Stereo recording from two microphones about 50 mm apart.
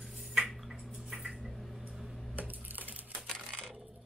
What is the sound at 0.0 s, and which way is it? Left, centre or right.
Drip, centre.